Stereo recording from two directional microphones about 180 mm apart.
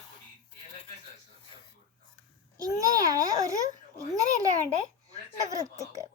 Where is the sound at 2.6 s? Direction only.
20° right (ahead or behind).